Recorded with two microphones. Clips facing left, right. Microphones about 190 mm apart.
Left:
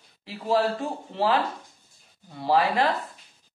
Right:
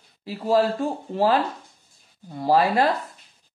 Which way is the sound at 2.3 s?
45° right (ahead or behind).